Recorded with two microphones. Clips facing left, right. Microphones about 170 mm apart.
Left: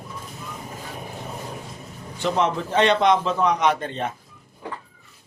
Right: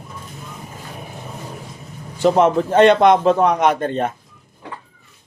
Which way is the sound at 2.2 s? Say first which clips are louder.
Right 8 dB; 50° right (ahead or behind).